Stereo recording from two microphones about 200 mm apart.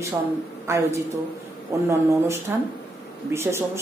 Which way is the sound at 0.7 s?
15° right (ahead or behind).